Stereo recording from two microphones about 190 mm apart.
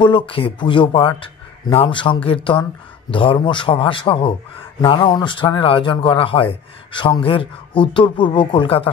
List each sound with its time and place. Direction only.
0.0 s a man's voice: 25° left (ahead or behind)